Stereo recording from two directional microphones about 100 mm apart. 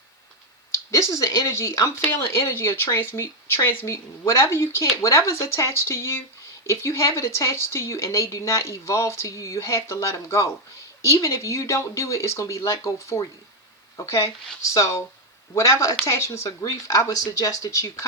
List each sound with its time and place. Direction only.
0.9 s speech: 30° left (ahead or behind)